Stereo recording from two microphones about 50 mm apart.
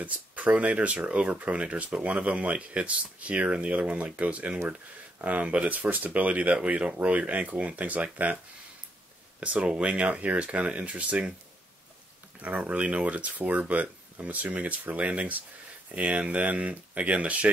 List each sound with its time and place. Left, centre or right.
0.0 s speech: right
9.4 s speech: right
12.4 s speech: right